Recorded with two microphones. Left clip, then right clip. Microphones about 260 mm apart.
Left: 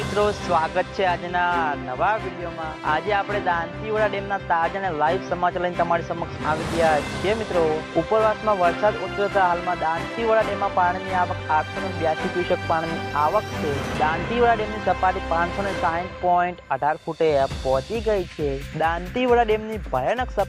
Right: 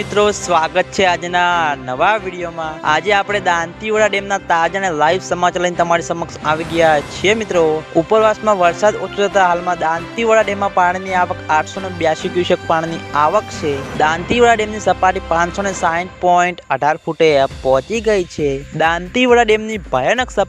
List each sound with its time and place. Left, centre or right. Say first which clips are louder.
0.2 s a man's voice: right 7 dB; right